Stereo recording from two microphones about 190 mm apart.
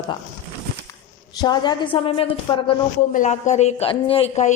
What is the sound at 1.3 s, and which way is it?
A woman's voice, 20° left (ahead or behind).